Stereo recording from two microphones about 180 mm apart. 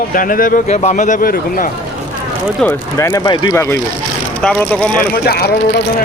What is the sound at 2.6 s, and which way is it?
Speech, 15° left (ahead or behind).